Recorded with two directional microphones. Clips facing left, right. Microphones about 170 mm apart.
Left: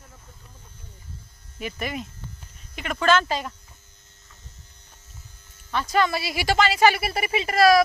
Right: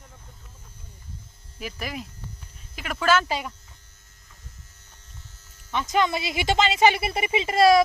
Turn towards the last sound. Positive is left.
turn(degrees=-25)  # may be behind; listen again after turning